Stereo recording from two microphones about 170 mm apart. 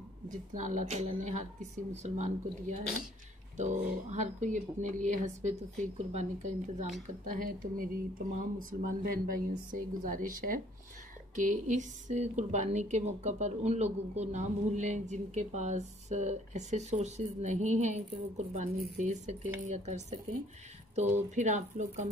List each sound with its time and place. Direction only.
0.6 s a woman's voice: 45° right (ahead or behind)